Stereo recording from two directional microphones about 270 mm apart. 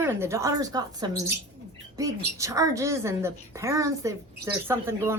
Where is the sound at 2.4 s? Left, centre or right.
Centre.